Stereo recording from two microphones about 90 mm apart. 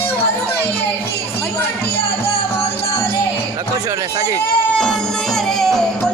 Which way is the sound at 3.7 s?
35° right (ahead or behind).